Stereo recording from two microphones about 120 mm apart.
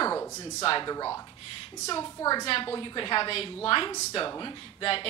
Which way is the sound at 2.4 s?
50° left (ahead or behind).